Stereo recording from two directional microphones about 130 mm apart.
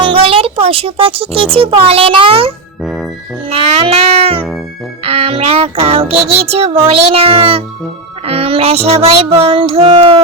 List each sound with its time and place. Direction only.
0.0 s a child's voice: 45° right (ahead or behind)
3.5 s music: 55° right (ahead or behind)
5.0 s child singing: 45° right (ahead or behind)